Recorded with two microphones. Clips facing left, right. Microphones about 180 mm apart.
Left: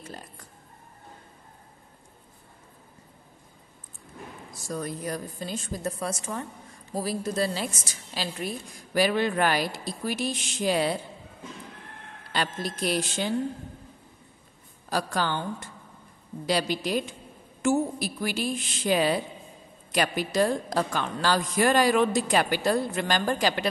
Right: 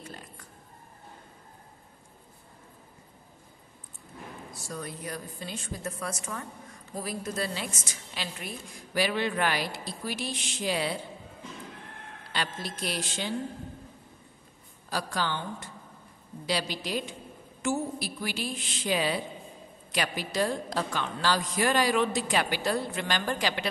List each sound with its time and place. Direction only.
4.6 s a woman's voice: 45° left (ahead or behind)
12.3 s a woman's voice: 45° left (ahead or behind)
14.9 s a woman's voice: 50° left (ahead or behind)